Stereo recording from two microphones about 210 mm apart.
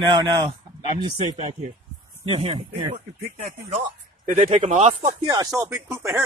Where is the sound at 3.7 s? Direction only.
35° right (ahead or behind).